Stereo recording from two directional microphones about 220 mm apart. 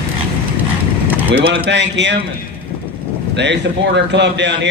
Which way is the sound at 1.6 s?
55° right (ahead or behind).